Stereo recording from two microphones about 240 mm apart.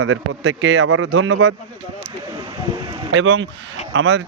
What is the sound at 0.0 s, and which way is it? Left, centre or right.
Speech, right.